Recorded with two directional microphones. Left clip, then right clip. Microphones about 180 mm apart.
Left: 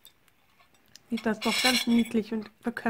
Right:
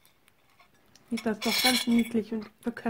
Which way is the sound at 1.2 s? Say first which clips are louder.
Even; 30° left (ahead or behind).